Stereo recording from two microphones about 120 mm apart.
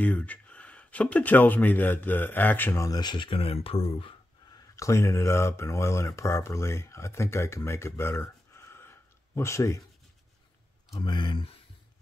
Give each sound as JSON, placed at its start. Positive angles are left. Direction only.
{"t": 0.0, "sound": "speech", "side_deg": 10}
{"t": 4.7, "sound": "speech", "side_deg": 25}
{"t": 10.9, "sound": "speech", "side_deg": 40}